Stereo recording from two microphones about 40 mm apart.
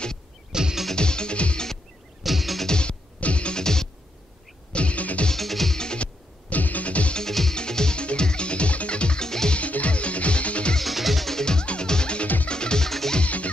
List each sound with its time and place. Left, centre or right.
0.5 s music: centre
0.9 s music: left
2.2 s music: centre
2.6 s music: left
3.5 s music: centre
4.7 s music: left
5.3 s music: centre
6.5 s music: left
7.2 s music: centre
9.6 s music: left
10.8 s music: centre
11.3 s music: centre